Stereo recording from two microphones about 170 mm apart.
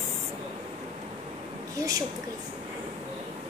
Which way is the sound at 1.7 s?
20° right (ahead or behind).